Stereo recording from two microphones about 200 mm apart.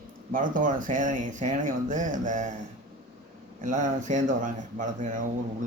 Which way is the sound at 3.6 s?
40° right (ahead or behind).